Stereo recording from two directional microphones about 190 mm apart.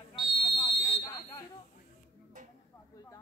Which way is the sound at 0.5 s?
30° left (ahead or behind).